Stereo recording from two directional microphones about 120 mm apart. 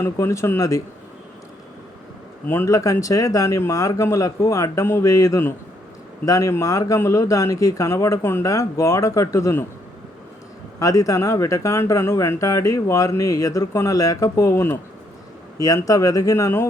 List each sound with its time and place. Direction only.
0.0 s speech: 25° left (ahead or behind)
2.5 s speech: 25° left (ahead or behind)
10.8 s speech: 30° left (ahead or behind)